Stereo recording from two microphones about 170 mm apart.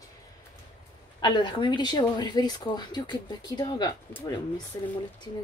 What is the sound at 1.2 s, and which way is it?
Speech, 25° left (ahead or behind).